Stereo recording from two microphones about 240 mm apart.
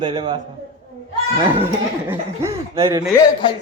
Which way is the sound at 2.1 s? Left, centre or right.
Centre.